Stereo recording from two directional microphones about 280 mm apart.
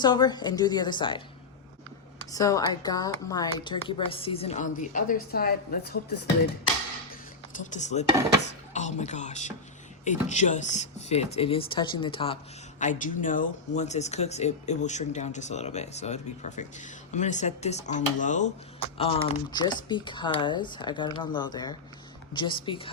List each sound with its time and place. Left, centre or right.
0.0 s a woman's voice: centre
2.3 s speech: centre; by 6.0 s left
7.5 s a woman's voice: left